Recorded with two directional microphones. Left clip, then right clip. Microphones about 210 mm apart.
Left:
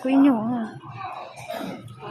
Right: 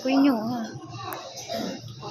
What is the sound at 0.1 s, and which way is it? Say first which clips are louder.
Speech: left 3 dB; 25° left (ahead or behind).